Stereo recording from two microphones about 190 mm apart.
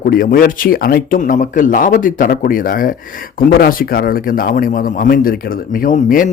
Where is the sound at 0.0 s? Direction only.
50° left (ahead or behind).